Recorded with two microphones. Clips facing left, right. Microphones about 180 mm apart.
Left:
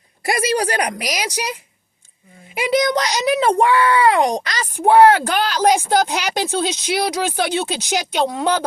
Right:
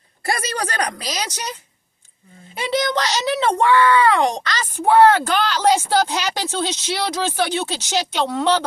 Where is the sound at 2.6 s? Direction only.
10° left (ahead or behind).